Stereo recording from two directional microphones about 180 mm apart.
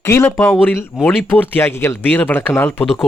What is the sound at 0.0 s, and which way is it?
Speech, 15° left (ahead or behind).